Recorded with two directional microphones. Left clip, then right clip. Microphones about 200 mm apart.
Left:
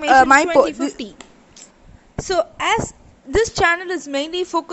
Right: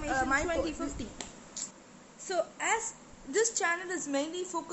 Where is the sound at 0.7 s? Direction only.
25° left (ahead or behind).